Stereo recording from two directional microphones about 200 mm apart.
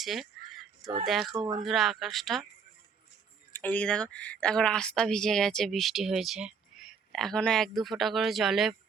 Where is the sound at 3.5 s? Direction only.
10° left (ahead or behind).